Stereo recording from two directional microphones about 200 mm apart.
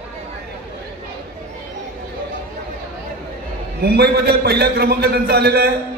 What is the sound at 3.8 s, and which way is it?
A man's voice, 50° right (ahead or behind).